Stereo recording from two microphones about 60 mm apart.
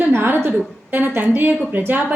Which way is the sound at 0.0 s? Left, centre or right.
Right.